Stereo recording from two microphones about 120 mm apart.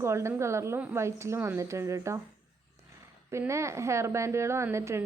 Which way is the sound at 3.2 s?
25° right (ahead or behind).